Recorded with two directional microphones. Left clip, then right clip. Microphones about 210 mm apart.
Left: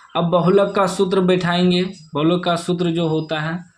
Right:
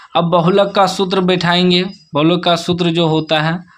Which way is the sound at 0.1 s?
20° right (ahead or behind).